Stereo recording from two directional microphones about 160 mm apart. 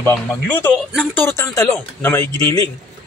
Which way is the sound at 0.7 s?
10° left (ahead or behind).